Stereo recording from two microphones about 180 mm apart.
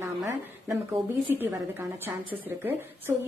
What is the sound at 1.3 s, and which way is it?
Speech, 10° right (ahead or behind).